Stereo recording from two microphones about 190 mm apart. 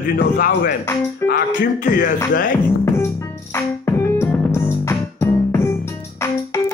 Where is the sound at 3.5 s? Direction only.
15° left (ahead or behind).